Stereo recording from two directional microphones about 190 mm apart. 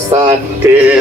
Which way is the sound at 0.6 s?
15° right (ahead or behind).